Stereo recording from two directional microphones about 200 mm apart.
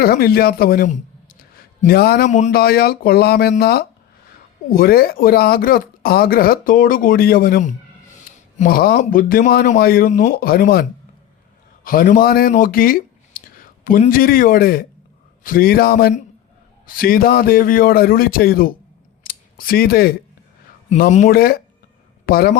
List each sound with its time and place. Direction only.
0.0 s speech: 50° left (ahead or behind)
19.2 s a sound: 45° left (ahead or behind)
20.9 s speech: 35° left (ahead or behind)